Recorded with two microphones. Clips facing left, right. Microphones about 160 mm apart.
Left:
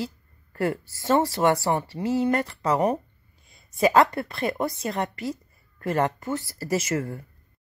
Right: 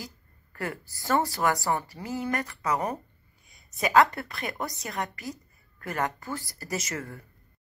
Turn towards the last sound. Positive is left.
turn(degrees=30)  # may be behind; listen again after turning